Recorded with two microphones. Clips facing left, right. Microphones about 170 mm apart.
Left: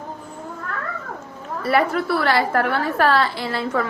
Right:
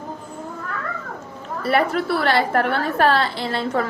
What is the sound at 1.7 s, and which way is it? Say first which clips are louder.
A woman's voice: even; 25° right (ahead or behind).